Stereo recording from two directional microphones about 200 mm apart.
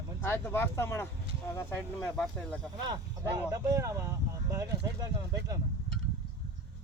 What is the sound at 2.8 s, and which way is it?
Speech, 20° right (ahead or behind).